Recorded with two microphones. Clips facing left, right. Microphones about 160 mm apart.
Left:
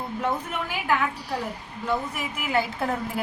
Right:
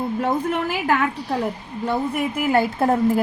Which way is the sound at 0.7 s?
80° right.